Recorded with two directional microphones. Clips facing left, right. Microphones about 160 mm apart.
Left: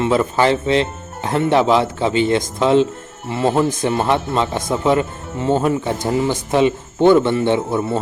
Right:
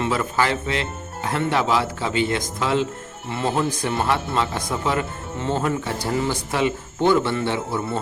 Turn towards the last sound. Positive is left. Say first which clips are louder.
# left 7 dB
turn(degrees=20)  # may be behind; listen again after turning